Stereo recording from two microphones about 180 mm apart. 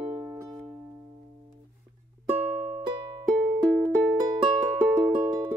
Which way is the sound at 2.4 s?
5° right (ahead or behind).